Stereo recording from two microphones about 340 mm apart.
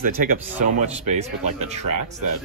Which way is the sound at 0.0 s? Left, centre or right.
Right.